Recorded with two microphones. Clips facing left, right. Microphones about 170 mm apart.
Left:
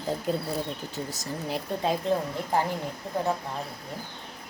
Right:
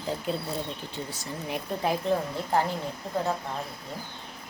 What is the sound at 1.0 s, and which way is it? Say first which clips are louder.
Speech: left 3 dB; 40° left (ahead or behind).